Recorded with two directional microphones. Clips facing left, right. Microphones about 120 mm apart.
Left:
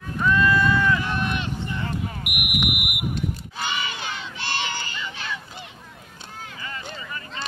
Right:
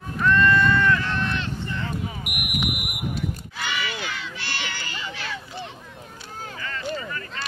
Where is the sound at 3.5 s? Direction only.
25° left (ahead or behind).